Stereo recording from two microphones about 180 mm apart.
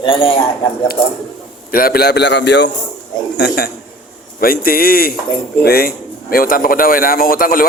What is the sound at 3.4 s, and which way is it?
Speech, 65° left (ahead or behind).